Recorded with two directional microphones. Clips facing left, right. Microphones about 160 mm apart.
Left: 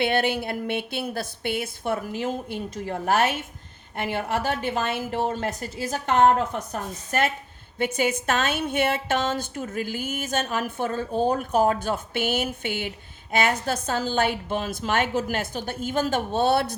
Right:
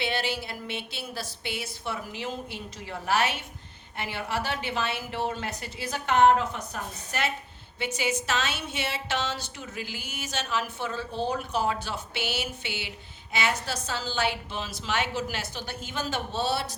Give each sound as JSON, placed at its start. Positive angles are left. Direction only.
{"t": 0.0, "sound": "a woman's voice", "side_deg": 55}